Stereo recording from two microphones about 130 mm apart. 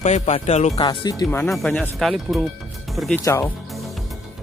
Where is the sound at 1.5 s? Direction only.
5° left (ahead or behind).